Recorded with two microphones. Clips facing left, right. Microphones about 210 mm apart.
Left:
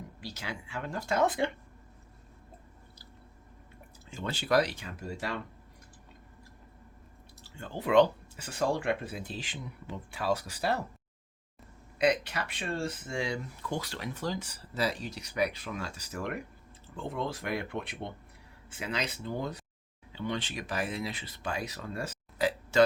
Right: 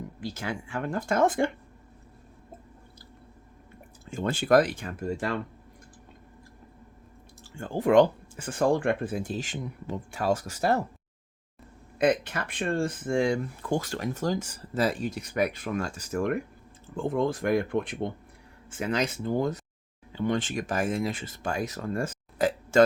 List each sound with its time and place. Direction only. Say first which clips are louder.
0.2 s speech: right 7 dB; 50° right (ahead or behind)
4.0 s speech: right 8 dB; 50° right (ahead or behind)
7.4 s speech: right 8 dB; 50° right (ahead or behind)
11.9 s speech: right 3 dB; 50° right (ahead or behind)